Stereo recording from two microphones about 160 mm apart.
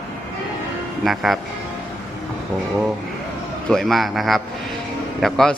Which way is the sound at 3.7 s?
Centre (ahead or behind).